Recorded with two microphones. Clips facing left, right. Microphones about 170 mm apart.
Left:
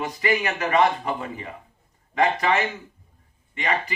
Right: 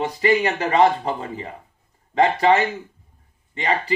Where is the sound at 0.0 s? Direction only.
30° right (ahead or behind).